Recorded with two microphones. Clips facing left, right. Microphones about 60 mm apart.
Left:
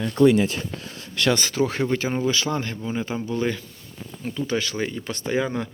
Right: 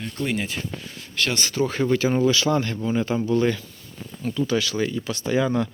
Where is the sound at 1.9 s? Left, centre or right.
Left.